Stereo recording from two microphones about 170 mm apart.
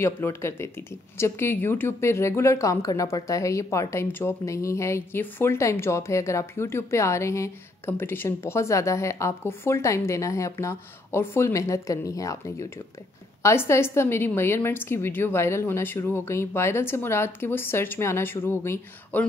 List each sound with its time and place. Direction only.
0.0 s speech: 15° left (ahead or behind)